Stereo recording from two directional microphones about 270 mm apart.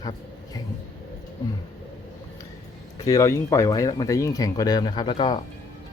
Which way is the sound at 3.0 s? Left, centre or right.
Centre.